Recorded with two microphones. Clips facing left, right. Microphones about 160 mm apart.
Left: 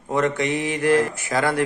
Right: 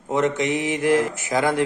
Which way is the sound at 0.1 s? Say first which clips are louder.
Right 1 dB; 20° right (ahead or behind).